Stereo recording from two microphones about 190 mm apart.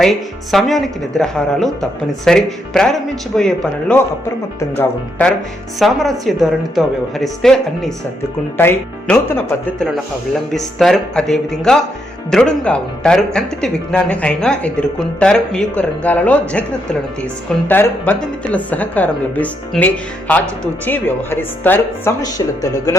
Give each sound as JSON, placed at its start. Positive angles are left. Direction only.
{"t": 0.0, "sound": "speech", "side_deg": 0}